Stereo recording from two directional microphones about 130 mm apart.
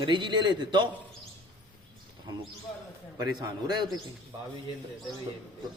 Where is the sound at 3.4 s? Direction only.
35° right (ahead or behind).